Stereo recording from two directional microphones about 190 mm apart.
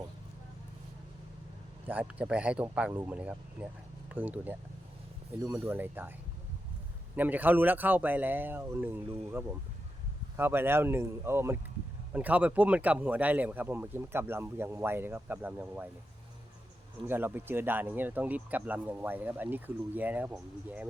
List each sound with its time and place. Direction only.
1.9 s speech: 10° right (ahead or behind)
7.2 s speech: 10° right (ahead or behind)
17.1 s speech: 10° right (ahead or behind)